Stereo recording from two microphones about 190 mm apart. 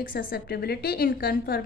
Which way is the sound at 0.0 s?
50° left (ahead or behind).